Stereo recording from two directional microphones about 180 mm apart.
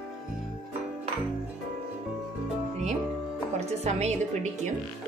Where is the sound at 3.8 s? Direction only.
40° right (ahead or behind).